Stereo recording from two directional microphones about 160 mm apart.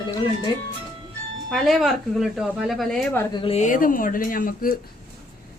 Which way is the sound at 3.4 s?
45° left (ahead or behind).